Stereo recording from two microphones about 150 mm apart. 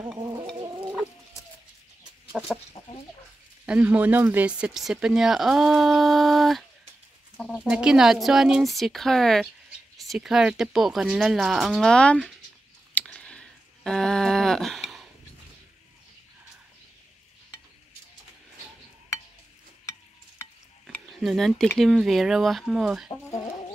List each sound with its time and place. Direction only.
0.6 s chicken: 30° right (ahead or behind)
2.3 s speech: 5° left (ahead or behind)
3.6 s speech: 10° right (ahead or behind)
12.9 s a sound: 10° left (ahead or behind)
21.2 s speech: centre (ahead or behind)